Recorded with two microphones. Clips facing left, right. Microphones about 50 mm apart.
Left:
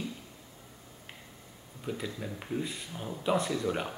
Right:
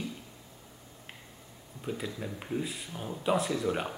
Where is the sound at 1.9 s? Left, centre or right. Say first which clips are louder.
Even; centre.